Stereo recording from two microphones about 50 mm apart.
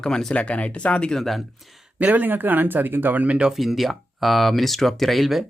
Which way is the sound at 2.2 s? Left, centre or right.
Right.